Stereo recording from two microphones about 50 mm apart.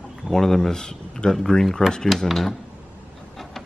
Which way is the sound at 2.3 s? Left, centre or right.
Centre.